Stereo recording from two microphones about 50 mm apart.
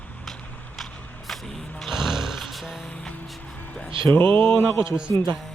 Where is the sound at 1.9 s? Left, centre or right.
Centre.